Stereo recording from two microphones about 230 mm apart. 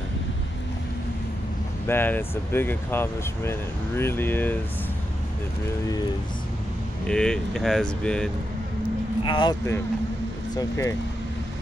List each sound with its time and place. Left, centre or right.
1.9 s speech: centre
7.1 s speech: centre
9.2 s speech: left